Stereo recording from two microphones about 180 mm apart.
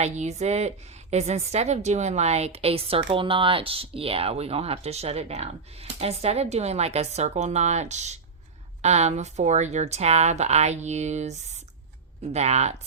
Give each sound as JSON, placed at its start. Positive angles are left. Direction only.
{"t": 0.0, "sound": "a woman's voice", "side_deg": -40}